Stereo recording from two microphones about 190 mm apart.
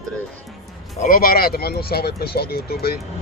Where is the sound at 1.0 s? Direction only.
50° left (ahead or behind).